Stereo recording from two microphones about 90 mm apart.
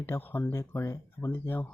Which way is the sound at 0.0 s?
20° left (ahead or behind).